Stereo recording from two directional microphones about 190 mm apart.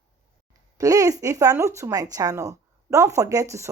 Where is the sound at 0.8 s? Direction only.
15° right (ahead or behind).